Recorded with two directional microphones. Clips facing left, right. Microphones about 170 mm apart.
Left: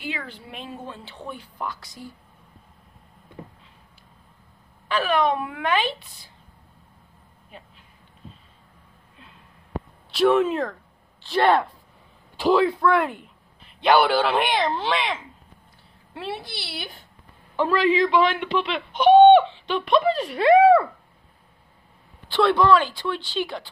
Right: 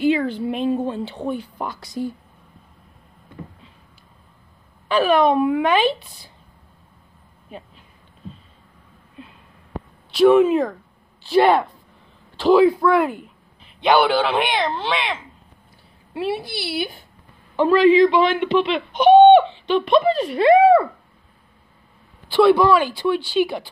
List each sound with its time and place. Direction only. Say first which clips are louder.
0.0 s speech: right 15 dB; 25° right (ahead or behind)
4.9 s speech: right 6 dB; 20° right (ahead or behind)
10.1 s speech: right 6 dB; 5° right (ahead or behind)
16.1 s speech: right 8 dB; 10° right (ahead or behind)
22.3 s speech: right 4 dB; 5° right (ahead or behind)